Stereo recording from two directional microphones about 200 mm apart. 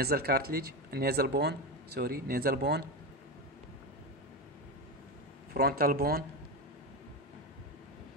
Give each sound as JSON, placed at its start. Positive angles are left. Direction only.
{"t": 0.0, "sound": "speech", "side_deg": -50}
{"t": 5.5, "sound": "speech", "side_deg": -50}